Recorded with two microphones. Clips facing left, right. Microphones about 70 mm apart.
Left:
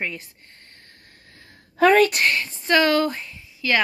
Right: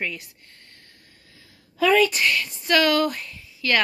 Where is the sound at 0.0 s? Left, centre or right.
Left.